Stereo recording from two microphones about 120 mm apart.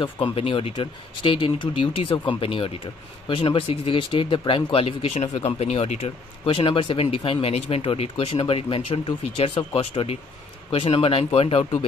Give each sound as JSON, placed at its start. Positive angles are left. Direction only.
{"t": 0.0, "sound": "speech", "side_deg": 50}